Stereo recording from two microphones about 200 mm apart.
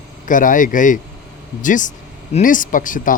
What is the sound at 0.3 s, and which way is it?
Speech, 40° left (ahead or behind).